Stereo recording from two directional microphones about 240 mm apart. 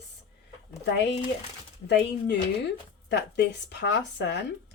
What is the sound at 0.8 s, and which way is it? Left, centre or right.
Speech, left.